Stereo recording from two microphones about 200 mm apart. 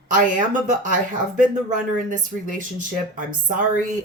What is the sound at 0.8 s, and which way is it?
Speech, 40° right (ahead or behind).